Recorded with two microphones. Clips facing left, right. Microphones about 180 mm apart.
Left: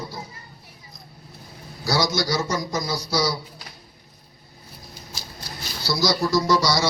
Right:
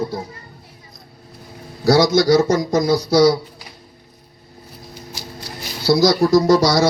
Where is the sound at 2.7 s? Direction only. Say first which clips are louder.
Right 10 dB; 55° right (ahead or behind).